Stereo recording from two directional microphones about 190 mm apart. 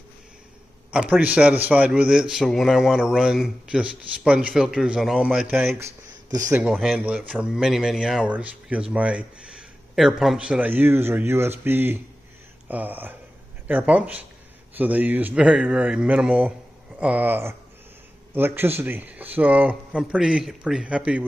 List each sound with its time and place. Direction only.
0.9 s a man's voice: 5° right (ahead or behind)
6.3 s a man's voice: 15° right (ahead or behind)
6.6 s a man's voice: 5° right (ahead or behind)